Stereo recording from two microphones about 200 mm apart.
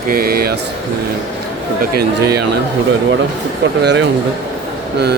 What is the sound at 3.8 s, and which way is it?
Speech, 60° right (ahead or behind).